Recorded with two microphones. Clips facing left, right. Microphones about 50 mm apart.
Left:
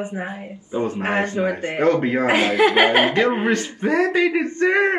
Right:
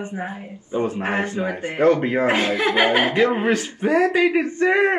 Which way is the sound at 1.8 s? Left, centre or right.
Right.